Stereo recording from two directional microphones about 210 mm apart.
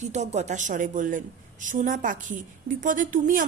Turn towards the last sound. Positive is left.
turn(degrees=-40)  # may be behind; listen again after turning